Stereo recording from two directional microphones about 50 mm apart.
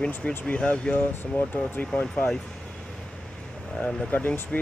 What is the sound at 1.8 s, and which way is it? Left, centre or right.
Speech, left.